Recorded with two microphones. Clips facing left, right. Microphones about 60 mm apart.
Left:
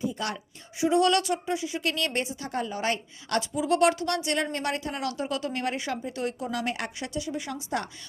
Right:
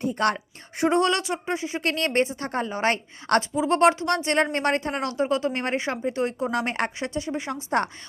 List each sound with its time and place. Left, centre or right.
0.0 s a woman's voice: right
1.0 s speech: right
3.7 s speech: right